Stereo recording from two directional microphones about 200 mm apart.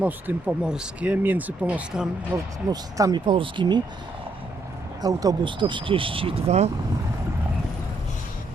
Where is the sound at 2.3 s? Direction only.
15° right (ahead or behind).